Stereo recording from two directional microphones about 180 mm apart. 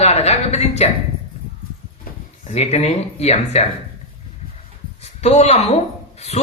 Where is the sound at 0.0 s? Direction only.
35° left (ahead or behind).